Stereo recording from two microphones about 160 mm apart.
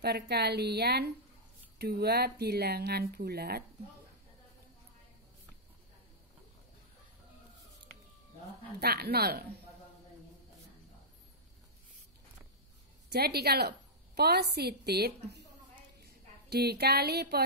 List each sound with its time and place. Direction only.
0.0 s a woman's voice: 90° right
8.7 s speech: 80° right
13.1 s a woman's voice: 80° right